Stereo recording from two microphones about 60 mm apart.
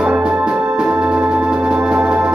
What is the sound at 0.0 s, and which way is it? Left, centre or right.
Organ, centre.